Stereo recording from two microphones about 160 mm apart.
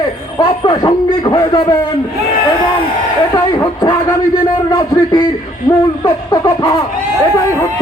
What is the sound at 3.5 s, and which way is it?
A man's voice, 25° left (ahead or behind).